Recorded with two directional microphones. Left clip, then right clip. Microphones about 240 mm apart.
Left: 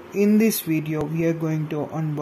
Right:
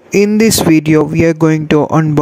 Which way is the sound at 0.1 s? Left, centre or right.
Right.